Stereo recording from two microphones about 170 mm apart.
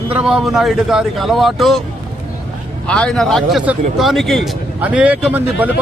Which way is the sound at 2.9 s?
5° left (ahead or behind).